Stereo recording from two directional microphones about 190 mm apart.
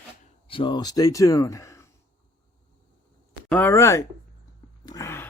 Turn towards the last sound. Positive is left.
turn(degrees=15)  # may be behind; listen again after turning